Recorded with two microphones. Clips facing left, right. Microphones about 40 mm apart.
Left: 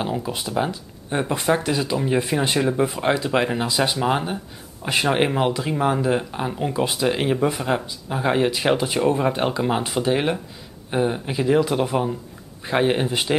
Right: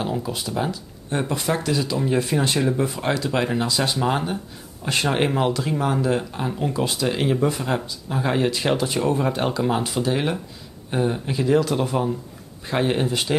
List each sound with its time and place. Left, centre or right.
0.0 s speech: centre